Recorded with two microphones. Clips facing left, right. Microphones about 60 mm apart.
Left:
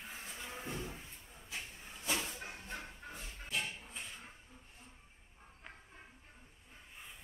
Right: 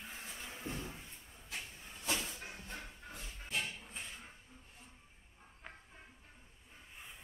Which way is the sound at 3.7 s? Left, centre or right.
Centre.